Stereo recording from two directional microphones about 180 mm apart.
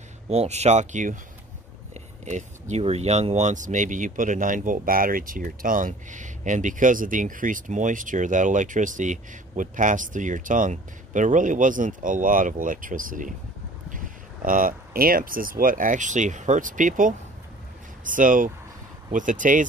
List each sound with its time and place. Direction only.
0.3 s speech: 35° right (ahead or behind)